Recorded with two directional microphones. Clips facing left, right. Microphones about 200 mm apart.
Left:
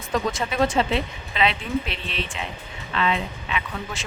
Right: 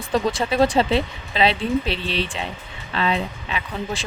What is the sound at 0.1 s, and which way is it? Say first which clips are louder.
Speech: right 4 dB; 35° right (ahead or behind).